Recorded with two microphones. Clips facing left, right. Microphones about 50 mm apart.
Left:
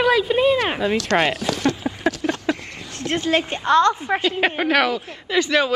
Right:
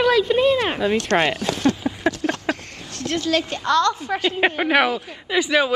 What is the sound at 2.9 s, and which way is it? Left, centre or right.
A woman's voice, left.